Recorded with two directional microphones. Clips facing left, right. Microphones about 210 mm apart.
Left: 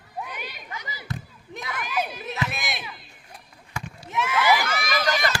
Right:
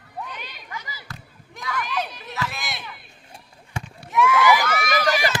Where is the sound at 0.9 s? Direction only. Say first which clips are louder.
Left 6 dB; 20° left (ahead or behind).